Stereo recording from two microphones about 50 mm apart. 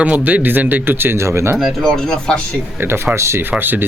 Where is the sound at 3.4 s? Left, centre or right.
Right.